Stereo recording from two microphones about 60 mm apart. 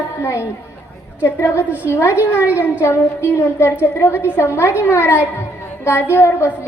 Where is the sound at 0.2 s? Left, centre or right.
Left.